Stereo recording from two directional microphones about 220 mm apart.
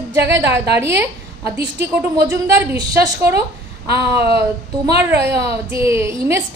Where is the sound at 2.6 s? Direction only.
10° right (ahead or behind).